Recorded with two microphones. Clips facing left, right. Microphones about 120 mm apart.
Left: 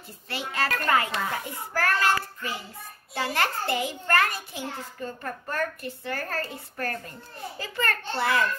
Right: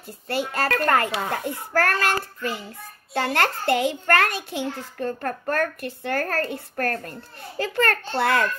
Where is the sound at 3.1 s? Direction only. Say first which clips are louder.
Right 4 dB; 60° right (ahead or behind).